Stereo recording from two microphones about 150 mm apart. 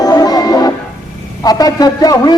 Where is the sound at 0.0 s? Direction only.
25° left (ahead or behind).